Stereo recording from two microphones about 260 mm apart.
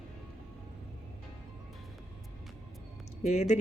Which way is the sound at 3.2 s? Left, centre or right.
Left.